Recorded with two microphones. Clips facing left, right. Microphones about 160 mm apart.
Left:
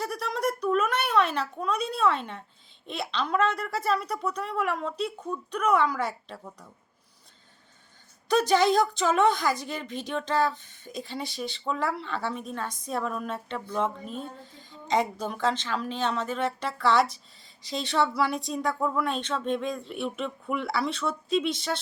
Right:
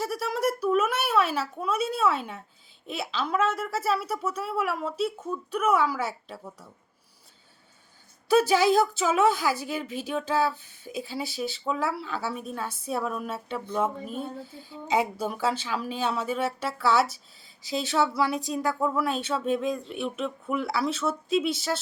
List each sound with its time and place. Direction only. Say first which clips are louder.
0.0 s a woman's voice: right 2 dB; 5° right (ahead or behind)
8.3 s a woman's voice: right 1 dB; 5° right (ahead or behind)